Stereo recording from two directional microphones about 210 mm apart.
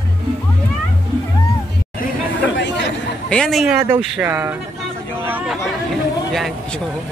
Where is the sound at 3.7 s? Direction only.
10° right (ahead or behind).